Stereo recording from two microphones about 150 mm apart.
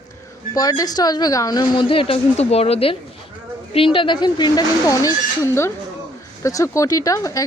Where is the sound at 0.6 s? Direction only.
25° left (ahead or behind).